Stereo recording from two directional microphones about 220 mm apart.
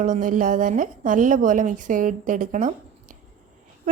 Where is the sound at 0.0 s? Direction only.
35° right (ahead or behind).